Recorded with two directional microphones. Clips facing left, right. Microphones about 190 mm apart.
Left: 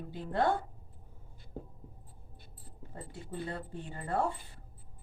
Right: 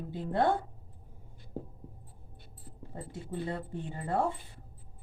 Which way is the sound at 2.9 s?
20° right (ahead or behind).